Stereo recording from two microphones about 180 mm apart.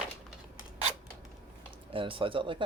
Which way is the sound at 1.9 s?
30° right (ahead or behind).